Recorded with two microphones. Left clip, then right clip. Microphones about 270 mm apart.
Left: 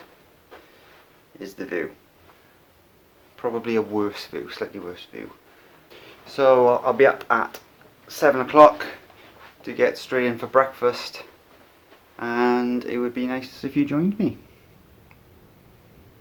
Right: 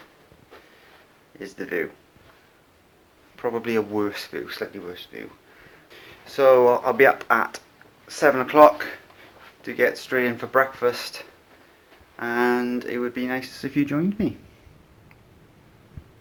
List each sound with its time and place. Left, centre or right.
1.4 s speech: centre
3.3 s speech: centre
6.3 s speech: centre